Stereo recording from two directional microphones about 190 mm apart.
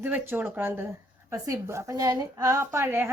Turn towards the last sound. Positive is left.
turn(degrees=-15)  # may be behind; listen again after turning